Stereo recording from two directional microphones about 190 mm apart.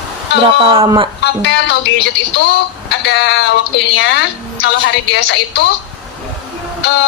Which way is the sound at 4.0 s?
70° left (ahead or behind).